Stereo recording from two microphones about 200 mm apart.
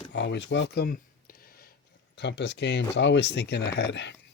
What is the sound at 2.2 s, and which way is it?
Speech, 60° left (ahead or behind).